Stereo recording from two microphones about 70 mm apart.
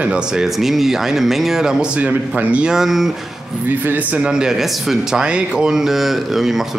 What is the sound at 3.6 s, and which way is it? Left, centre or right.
Speech, right.